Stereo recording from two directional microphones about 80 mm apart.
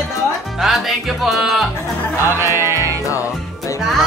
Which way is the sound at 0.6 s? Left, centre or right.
Centre.